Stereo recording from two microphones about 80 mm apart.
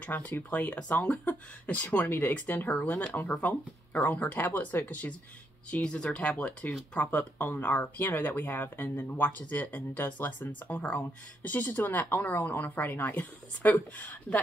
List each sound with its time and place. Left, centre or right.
0.0 s speech: left